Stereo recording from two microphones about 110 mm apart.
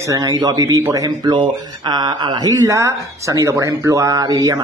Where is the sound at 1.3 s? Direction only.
45° right (ahead or behind).